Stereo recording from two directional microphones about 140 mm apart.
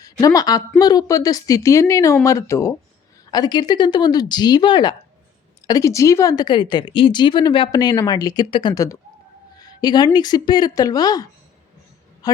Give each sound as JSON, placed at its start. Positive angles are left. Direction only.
{"t": 0.0, "sound": "a woman's voice", "side_deg": 25}